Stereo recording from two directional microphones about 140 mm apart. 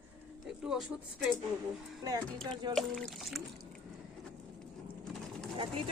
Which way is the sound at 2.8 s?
Centre (ahead or behind).